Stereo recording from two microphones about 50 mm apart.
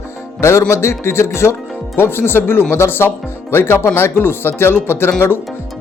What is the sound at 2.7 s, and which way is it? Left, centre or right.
Music, left.